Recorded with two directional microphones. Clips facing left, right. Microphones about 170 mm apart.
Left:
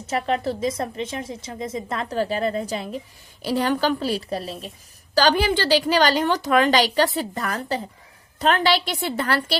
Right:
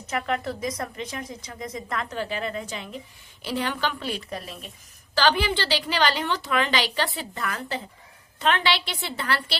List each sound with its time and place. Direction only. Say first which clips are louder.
0.1 s a woman's voice: left 4 dB; 30° left (ahead or behind)